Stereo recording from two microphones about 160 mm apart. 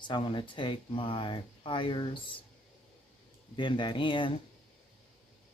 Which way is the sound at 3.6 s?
30° left (ahead or behind).